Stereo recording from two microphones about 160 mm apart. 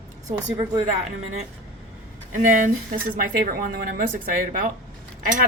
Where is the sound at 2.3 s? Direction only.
55° right (ahead or behind).